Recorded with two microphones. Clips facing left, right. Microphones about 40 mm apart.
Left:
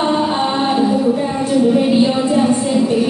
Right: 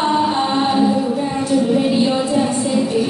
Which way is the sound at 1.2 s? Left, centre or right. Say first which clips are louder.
Left 2 dB; centre.